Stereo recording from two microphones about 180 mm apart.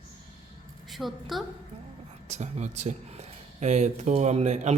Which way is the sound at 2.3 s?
40° right (ahead or behind).